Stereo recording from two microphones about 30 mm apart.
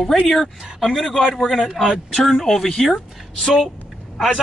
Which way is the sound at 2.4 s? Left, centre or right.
Centre.